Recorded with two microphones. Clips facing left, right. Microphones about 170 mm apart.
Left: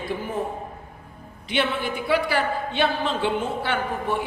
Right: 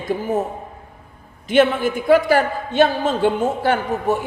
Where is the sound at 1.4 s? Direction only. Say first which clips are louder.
Right 9 dB; 45° right (ahead or behind).